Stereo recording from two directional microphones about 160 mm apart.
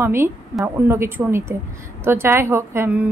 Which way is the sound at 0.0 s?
15° right (ahead or behind).